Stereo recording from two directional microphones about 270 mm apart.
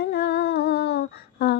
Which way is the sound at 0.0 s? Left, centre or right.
Left.